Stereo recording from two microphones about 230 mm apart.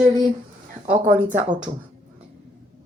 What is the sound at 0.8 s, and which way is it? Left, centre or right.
Speech, right.